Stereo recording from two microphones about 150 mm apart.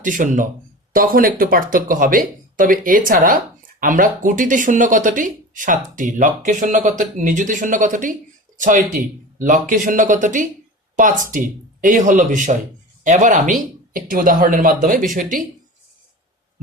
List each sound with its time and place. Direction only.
0.0 s speech: 60° right (ahead or behind)
0.9 s speech: 70° right (ahead or behind)